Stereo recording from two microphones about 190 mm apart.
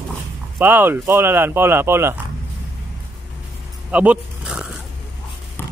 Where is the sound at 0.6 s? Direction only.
10° right (ahead or behind).